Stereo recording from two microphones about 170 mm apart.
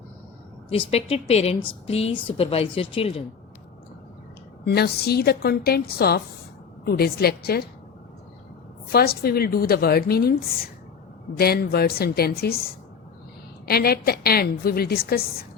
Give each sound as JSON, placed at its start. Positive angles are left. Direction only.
{"t": 0.7, "sound": "a woman's voice", "side_deg": 35}
{"t": 4.6, "sound": "a woman's voice", "side_deg": 70}
{"t": 8.9, "sound": "a woman's voice", "side_deg": 65}
{"t": 13.7, "sound": "a woman's voice", "side_deg": 65}